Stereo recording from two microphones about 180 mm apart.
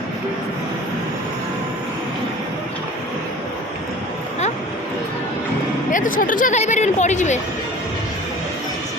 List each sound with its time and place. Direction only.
5.9 s speech: 50° left (ahead or behind)